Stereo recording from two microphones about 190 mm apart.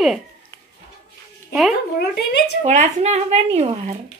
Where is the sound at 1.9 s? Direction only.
60° left (ahead or behind).